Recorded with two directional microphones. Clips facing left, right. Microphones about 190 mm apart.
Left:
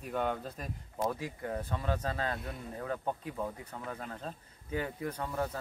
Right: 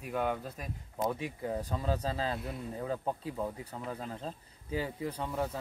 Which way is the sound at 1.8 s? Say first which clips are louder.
Right 1 dB; 30° right (ahead or behind).